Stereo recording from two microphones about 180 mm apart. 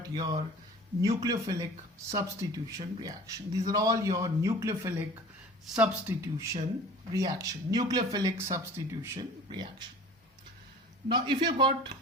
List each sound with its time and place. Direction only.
0.1 s speech: 20° right (ahead or behind)
11.1 s speech: 25° right (ahead or behind)